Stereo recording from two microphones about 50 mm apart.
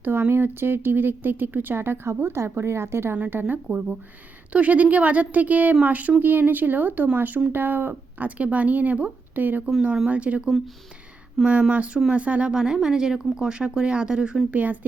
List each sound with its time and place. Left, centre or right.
0.0 s speech: right
3.4 s speech: right
8.4 s speech: right
11.4 s speech: centre
12.1 s speech: right
12.5 s speech: centre
14.5 s speech: right